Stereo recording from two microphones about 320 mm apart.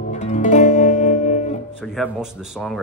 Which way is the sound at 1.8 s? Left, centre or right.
Centre.